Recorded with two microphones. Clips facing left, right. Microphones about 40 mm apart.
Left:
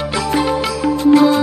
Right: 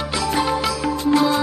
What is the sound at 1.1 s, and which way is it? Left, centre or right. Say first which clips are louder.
Music: left 7 dB; left.